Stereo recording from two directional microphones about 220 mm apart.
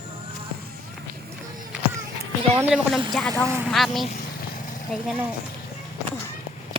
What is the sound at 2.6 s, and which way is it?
Speech, 5° right (ahead or behind).